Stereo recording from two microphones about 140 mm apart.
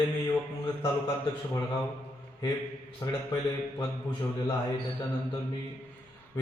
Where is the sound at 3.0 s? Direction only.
25° left (ahead or behind).